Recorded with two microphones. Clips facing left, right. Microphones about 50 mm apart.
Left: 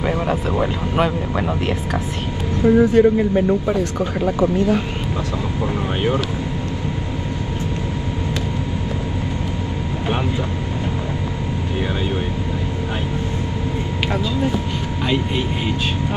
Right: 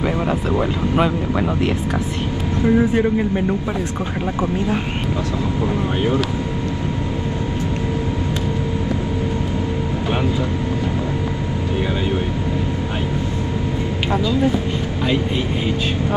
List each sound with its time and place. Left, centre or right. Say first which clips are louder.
0.0 s speech: even; centre
2.6 s speech: left 4 dB; centre
3.2 s speech: left 3 dB; centre
4.4 s speech: left 3 dB; right